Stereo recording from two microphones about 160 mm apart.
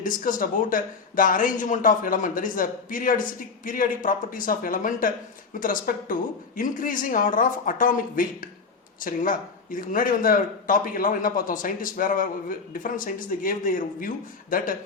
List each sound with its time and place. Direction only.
0.0 s speech: 60° left (ahead or behind)